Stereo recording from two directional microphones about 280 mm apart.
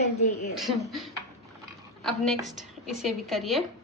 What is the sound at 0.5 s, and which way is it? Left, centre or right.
Speech, centre.